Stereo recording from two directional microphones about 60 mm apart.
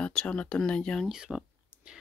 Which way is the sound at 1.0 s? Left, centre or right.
Centre.